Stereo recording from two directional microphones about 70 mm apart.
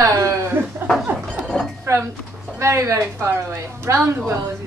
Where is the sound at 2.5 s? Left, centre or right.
Right.